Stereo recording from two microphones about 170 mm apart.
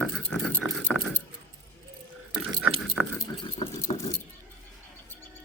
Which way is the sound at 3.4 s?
25° left (ahead or behind).